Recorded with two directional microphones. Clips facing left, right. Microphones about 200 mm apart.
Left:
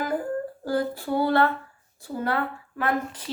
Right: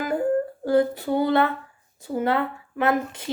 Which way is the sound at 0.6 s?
20° right (ahead or behind).